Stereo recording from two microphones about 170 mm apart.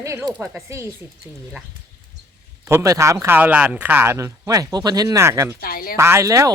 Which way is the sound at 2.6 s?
20° right (ahead or behind).